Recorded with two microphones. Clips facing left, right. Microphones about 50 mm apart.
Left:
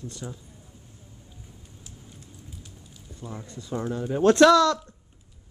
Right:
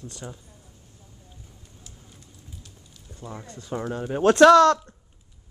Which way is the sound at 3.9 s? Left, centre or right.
Right.